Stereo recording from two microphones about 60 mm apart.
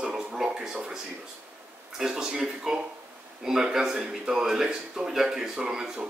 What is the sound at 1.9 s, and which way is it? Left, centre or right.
Speech, centre.